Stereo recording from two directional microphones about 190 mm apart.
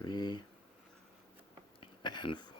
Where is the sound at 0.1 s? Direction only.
25° left (ahead or behind).